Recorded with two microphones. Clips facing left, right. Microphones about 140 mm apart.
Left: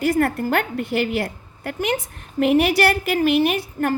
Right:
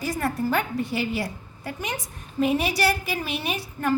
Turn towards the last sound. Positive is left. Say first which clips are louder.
# left 3 dB
turn(degrees=50)  # may be behind; listen again after turning